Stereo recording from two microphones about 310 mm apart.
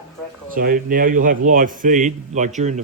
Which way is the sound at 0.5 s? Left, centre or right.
Right.